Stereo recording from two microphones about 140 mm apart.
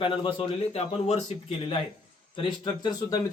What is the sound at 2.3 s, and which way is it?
Speech, 30° left (ahead or behind).